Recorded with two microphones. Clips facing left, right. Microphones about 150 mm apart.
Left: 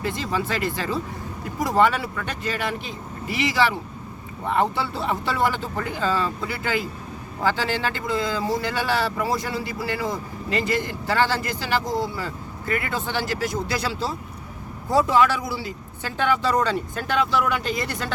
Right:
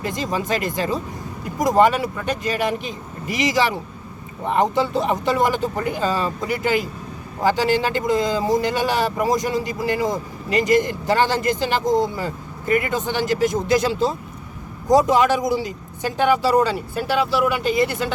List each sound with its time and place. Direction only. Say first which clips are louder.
0.0 s speech: right 2 dB; 15° right (ahead or behind)